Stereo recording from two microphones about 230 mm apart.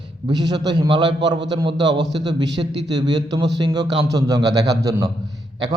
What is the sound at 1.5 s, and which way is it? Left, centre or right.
Speech, centre.